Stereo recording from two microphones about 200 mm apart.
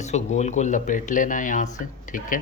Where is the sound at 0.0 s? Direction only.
35° left (ahead or behind).